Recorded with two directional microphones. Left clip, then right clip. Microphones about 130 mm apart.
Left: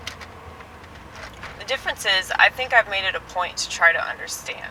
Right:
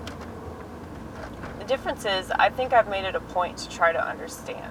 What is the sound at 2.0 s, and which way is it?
Speech, 45° left (ahead or behind).